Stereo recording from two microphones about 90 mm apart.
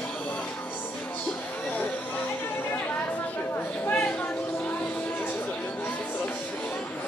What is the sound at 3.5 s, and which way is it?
Chatter, 20° left (ahead or behind).